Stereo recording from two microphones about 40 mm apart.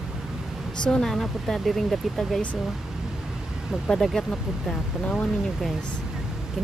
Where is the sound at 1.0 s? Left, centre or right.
Centre.